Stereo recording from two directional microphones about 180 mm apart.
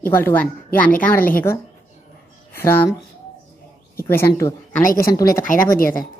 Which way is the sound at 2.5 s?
15° left (ahead or behind).